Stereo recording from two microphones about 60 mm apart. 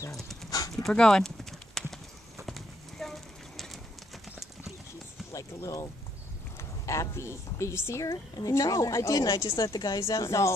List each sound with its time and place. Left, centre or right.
0.1 s clip-clop: centre
0.5 s clip-clop: left
0.8 s clip-clop: centre
5.3 s a woman's voice: left
6.9 s a woman's voice: left
8.0 s a woman's voice: left
9.7 s a woman's voice: left